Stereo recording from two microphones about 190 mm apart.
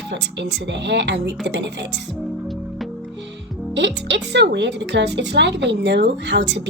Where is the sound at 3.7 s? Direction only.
65° right (ahead or behind).